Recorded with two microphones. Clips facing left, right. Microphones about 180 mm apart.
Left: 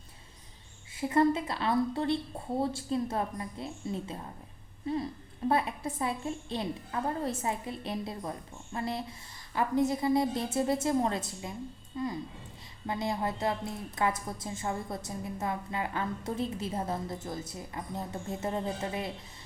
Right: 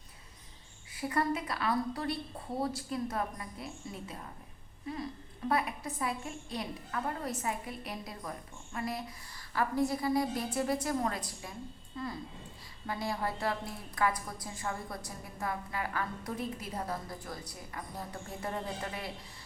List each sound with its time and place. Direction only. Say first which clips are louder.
0.9 s a woman's voice: left 6 dB; 25° left (ahead or behind)